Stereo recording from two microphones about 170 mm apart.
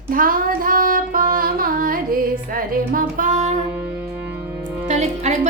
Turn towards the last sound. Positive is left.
turn(degrees=-45)  # may be behind; listen again after turning